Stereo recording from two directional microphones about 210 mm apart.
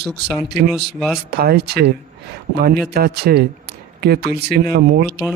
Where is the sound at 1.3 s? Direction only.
50° right (ahead or behind).